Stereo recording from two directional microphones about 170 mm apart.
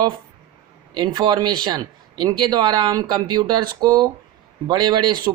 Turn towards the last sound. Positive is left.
turn(degrees=-25)  # may be behind; listen again after turning